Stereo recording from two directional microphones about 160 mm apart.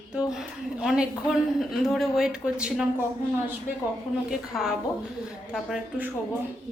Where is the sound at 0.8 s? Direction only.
5° right (ahead or behind).